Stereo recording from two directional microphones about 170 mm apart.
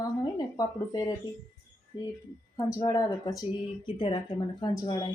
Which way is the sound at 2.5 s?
20° left (ahead or behind).